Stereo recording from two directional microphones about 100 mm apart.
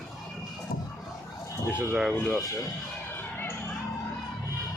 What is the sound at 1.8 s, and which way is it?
Speech, 5° right (ahead or behind).